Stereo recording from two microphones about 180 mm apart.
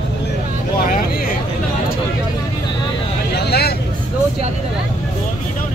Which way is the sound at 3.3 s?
60° left (ahead or behind).